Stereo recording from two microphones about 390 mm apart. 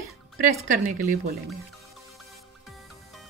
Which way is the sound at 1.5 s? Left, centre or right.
Centre.